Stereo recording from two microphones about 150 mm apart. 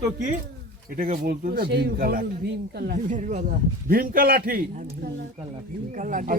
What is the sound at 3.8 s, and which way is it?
A man's voice, 70° right (ahead or behind).